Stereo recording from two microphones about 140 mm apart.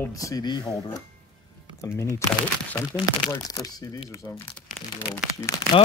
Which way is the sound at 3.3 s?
25° left (ahead or behind).